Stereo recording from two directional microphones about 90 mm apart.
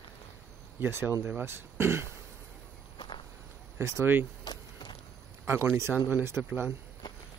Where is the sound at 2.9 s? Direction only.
65° left (ahead or behind).